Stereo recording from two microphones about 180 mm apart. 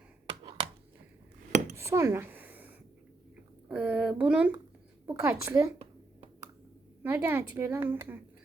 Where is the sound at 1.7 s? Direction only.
15° right (ahead or behind).